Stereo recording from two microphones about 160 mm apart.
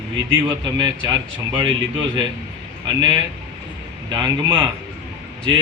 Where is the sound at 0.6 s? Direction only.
25° right (ahead or behind).